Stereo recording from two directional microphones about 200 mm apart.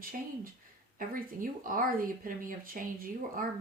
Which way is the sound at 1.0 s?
45° right (ahead or behind).